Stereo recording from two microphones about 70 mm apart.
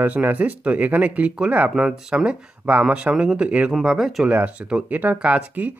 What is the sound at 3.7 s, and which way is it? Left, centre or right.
Speech, centre.